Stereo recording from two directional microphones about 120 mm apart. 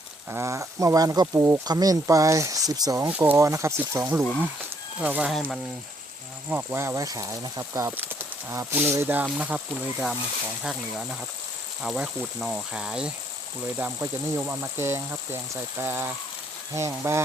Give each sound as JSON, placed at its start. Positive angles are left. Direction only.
{"t": 0.3, "sound": "speech", "side_deg": -20}
{"t": 3.1, "sound": "speech", "side_deg": -15}
{"t": 3.3, "sound": "speech", "side_deg": -25}
{"t": 4.9, "sound": "speech", "side_deg": -10}
{"t": 5.3, "sound": "speech", "side_deg": 0}
{"t": 6.5, "sound": "speech", "side_deg": -15}
{"t": 10.6, "sound": "speech", "side_deg": -5}
{"t": 13.7, "sound": "speech", "side_deg": -20}